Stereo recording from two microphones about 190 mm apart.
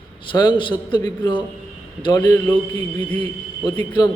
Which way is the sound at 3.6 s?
25° left (ahead or behind).